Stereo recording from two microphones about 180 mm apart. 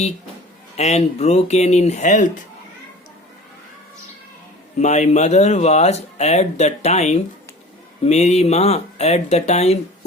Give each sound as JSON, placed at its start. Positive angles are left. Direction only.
{"t": 0.8, "sound": "speech", "side_deg": 35}
{"t": 4.8, "sound": "speech", "side_deg": 40}